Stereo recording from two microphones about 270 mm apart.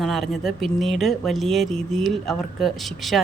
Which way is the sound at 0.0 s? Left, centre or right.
Centre.